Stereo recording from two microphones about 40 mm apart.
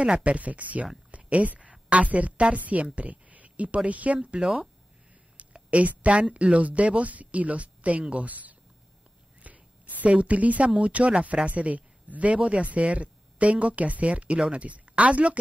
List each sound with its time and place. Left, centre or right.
0.0 s a woman's voice: right
10.0 s speech: right